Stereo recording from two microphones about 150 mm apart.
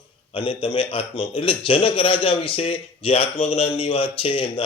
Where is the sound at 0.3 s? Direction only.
35° left (ahead or behind).